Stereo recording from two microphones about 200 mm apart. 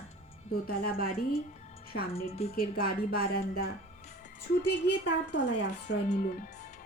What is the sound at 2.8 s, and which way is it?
Music, 50° left (ahead or behind).